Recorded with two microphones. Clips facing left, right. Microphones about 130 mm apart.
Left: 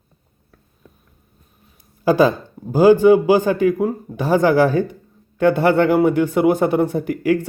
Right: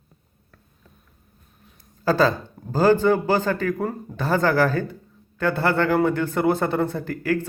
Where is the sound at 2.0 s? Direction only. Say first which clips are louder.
Left 5 dB; 15° left (ahead or behind).